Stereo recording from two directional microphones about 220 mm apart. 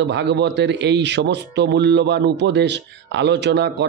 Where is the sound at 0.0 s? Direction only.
50° right (ahead or behind).